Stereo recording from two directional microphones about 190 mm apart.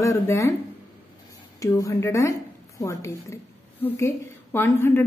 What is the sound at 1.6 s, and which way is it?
A woman's voice, 15° left (ahead or behind).